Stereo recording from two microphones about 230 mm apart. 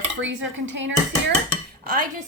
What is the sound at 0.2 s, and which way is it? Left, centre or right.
Speech, right.